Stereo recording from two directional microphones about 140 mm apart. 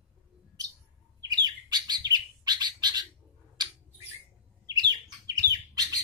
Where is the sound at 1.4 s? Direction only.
30° right (ahead or behind).